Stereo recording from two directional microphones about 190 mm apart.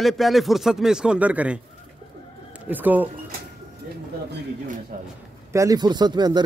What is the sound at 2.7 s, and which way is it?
Speech, 10° right (ahead or behind).